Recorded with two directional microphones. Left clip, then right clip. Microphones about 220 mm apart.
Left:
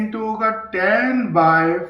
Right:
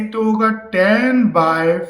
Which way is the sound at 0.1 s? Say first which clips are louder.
Right 5 dB; 55° right (ahead or behind).